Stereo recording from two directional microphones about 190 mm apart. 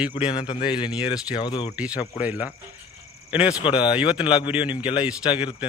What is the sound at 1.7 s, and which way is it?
Speech, 5° right (ahead or behind).